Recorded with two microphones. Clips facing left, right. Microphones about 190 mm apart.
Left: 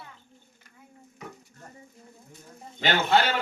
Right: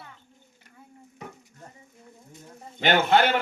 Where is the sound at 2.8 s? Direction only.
55° right (ahead or behind).